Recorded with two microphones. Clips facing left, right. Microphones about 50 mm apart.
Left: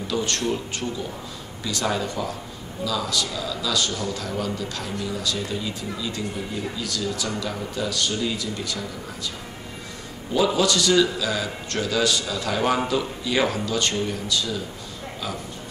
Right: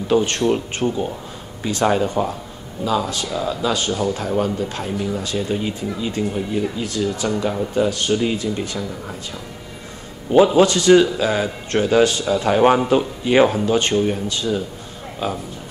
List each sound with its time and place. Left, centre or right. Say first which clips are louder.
0.1 s a man's voice: right 8 dB; right
10.3 s a man's voice: right 8 dB; right